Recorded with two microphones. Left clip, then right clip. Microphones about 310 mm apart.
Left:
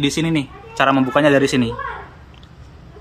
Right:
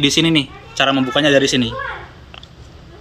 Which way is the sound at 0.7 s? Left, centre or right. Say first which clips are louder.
Even; centre.